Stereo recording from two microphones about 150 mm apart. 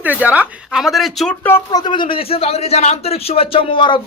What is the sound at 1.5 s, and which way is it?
Speech, 15° left (ahead or behind).